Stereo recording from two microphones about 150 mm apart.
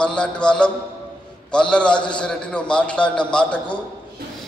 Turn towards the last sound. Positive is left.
turn(degrees=5)  # may be behind; listen again after turning